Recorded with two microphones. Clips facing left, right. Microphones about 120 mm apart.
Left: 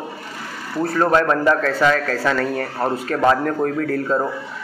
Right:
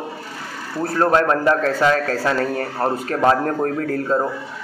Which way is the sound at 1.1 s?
35° right (ahead or behind).